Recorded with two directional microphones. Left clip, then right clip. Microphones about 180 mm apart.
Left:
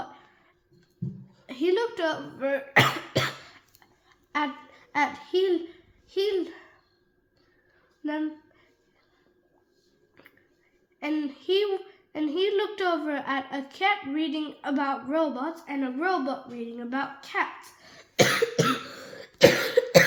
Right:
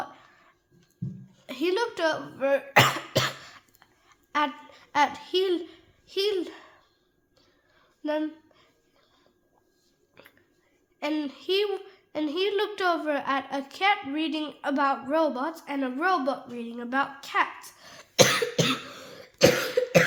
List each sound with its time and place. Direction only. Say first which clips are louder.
1.5 s cough: left 1 dB; 20° right (ahead or behind)
4.3 s a child's voice: right 2 dB; 20° right (ahead or behind)
8.0 s a child's voice: right 2 dB; 25° right (ahead or behind)
10.2 s a sound: right 2 dB; 25° right (ahead or behind)
11.0 s a child's voice: even; 20° right (ahead or behind)